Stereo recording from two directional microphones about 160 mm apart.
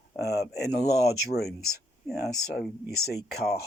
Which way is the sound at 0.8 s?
15° right (ahead or behind).